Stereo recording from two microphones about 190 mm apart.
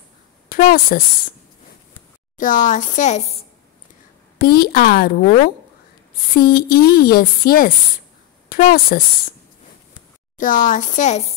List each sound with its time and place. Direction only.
0.5 s speech: 50° left (ahead or behind)
2.3 s speech: 40° left (ahead or behind)
4.4 s speech: 55° left (ahead or behind)
6.3 s a woman's voice: 55° left (ahead or behind)
10.3 s speech: 40° left (ahead or behind)